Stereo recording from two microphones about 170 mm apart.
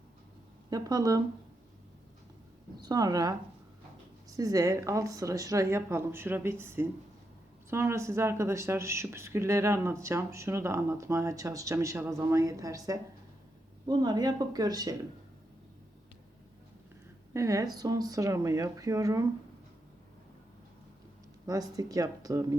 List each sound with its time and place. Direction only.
0.7 s speech: 20° right (ahead or behind)
2.8 s speech: 20° right (ahead or behind)
4.4 s speech: 20° right (ahead or behind)
17.3 s speech: 20° right (ahead or behind)
21.4 s speech: 20° right (ahead or behind)